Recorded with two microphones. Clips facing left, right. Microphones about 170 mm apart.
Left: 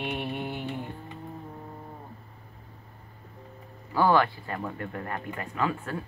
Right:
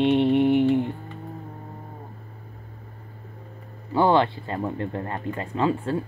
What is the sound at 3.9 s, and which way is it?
Speech, 25° right (ahead or behind).